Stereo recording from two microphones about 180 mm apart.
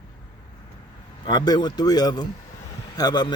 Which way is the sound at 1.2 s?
25° left (ahead or behind).